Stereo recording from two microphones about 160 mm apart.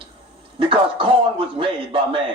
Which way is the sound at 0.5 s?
35° right (ahead or behind).